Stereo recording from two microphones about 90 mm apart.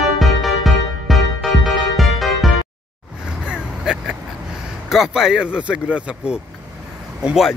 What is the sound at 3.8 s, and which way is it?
Vehicle, 5° right (ahead or behind).